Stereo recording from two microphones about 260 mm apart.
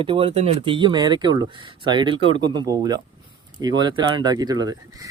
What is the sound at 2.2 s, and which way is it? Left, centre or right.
Speech, right.